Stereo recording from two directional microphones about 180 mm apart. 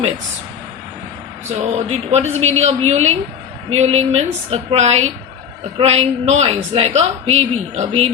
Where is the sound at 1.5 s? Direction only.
35° right (ahead or behind).